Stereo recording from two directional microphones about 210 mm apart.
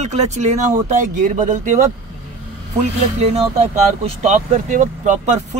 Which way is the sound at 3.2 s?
30° right (ahead or behind).